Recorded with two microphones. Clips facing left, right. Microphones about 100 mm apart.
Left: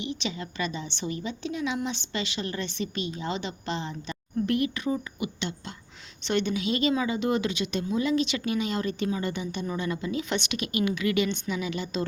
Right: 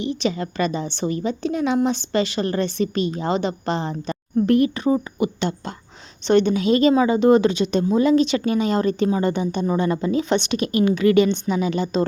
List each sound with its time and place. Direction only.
0.0 s a woman's voice: 40° right (ahead or behind)